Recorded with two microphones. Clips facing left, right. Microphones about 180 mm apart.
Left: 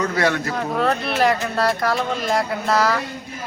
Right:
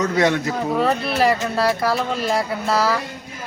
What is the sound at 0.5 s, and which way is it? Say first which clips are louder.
Speech: right 1 dB; 5° right (ahead or behind).